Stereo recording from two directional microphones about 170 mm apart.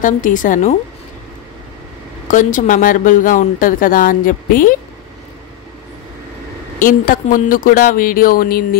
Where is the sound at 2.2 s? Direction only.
50° left (ahead or behind).